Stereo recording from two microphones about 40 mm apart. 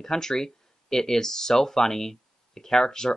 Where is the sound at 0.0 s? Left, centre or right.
Centre.